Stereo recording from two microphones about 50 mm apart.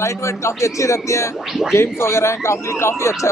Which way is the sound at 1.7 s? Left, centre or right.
Left.